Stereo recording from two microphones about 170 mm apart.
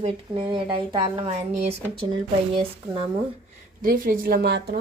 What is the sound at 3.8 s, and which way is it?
A woman's voice, 55° right (ahead or behind).